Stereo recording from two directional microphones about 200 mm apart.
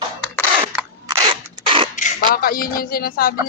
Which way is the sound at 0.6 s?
15° right (ahead or behind).